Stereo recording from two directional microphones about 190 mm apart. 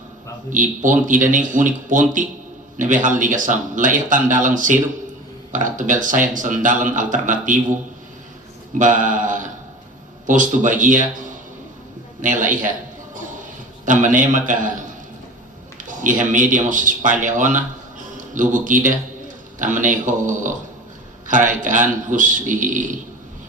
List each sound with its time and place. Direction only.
0.5 s speech: 45° right (ahead or behind)
8.8 s mantra: 45° right (ahead or behind)
10.2 s speech: 45° right (ahead or behind)
13.8 s speech: 45° right (ahead or behind)
15.9 s speech: 45° right (ahead or behind)